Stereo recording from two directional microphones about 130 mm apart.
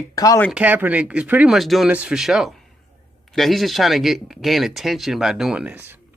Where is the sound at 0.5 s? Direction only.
15° right (ahead or behind).